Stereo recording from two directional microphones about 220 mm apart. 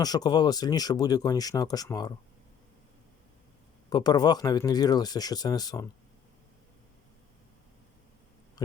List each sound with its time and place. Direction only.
0.0 s speech: 15° left (ahead or behind)
3.8 s speech: 20° left (ahead or behind)